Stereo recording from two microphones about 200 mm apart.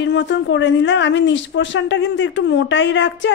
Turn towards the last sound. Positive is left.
turn(degrees=65)  # may be behind; listen again after turning